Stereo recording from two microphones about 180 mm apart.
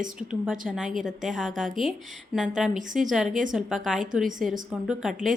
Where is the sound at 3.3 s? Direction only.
45° right (ahead or behind).